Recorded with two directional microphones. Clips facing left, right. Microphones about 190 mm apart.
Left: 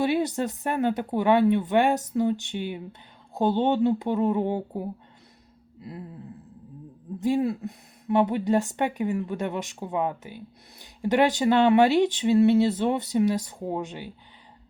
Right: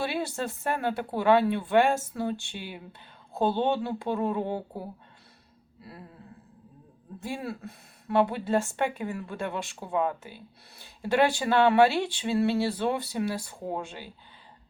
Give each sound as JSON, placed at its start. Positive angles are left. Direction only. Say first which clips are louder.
{"t": 0.0, "sound": "speech", "louder": "left 6 dB", "side_deg": 20}
{"t": 7.2, "sound": "speech", "louder": "left 11 dB", "side_deg": 20}